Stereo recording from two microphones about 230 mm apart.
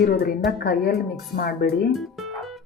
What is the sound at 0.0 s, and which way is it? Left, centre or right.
Speech, left.